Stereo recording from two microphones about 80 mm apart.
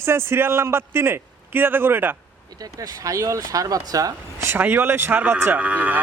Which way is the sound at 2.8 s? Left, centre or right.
Right.